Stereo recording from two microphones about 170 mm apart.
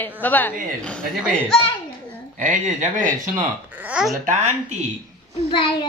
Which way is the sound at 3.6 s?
10° right (ahead or behind).